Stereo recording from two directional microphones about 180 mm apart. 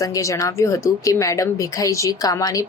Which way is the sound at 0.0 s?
15° left (ahead or behind).